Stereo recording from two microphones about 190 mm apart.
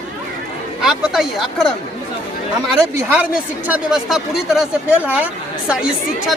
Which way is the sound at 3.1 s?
10° right (ahead or behind).